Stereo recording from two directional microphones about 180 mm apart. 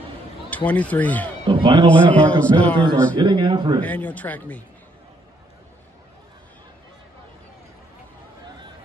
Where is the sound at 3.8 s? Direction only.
10° left (ahead or behind).